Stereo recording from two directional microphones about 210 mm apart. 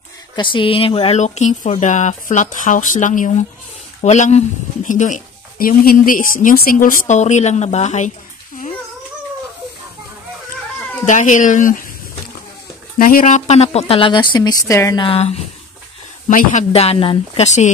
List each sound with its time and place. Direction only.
0.4 s speech: 25° left (ahead or behind)
11.1 s speech: 35° left (ahead or behind)
13.0 s a woman's voice: 40° left (ahead or behind); by 15.0 s 15° left (ahead or behind)
15.0 s speech: 30° left (ahead or behind)